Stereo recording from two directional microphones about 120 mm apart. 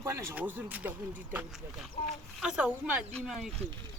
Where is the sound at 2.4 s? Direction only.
5° right (ahead or behind).